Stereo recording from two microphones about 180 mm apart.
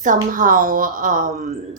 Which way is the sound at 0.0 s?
45° right (ahead or behind).